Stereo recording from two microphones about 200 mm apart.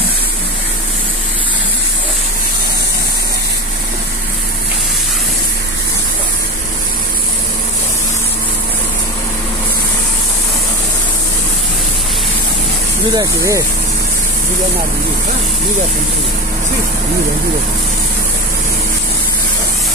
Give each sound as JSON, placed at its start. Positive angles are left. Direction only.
{"t": 13.1, "sound": "speech", "side_deg": -15}